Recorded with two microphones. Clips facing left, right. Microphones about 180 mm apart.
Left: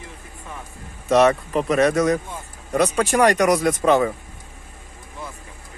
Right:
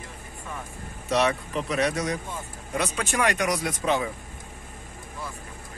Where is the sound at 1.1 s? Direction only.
50° left (ahead or behind).